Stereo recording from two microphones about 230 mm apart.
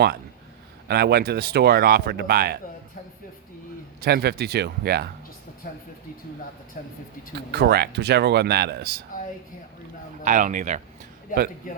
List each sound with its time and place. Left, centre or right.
0.9 s speech: right
4.0 s speech: right
5.6 s speech: left
7.3 s speech: right
10.2 s a man's voice: right
11.3 s speech: left